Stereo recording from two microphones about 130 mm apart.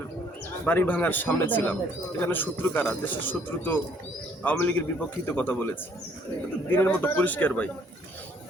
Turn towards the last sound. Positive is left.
turn(degrees=10)  # may be behind; listen again after turning